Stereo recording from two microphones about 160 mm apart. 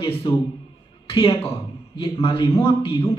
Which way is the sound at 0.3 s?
30° left (ahead or behind).